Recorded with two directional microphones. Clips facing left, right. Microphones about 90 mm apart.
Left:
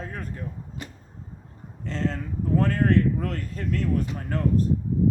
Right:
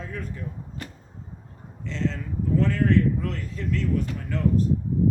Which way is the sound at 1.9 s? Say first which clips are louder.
Even; 45° left (ahead or behind).